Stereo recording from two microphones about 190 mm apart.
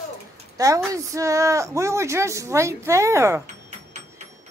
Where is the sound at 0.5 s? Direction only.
15° right (ahead or behind).